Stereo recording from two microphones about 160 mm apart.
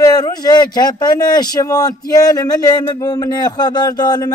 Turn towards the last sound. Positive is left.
turn(degrees=25)  # may be behind; listen again after turning